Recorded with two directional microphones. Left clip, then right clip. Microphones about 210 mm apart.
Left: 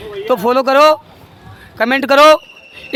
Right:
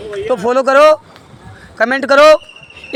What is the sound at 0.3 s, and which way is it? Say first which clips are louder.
Speech: even; 20° left (ahead or behind).